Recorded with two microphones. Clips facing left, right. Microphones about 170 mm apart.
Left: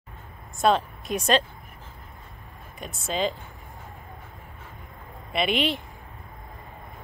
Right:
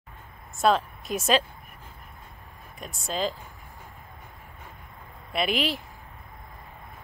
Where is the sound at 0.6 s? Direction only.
Centre (ahead or behind).